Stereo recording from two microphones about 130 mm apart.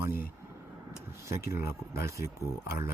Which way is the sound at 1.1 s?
20° right (ahead or behind).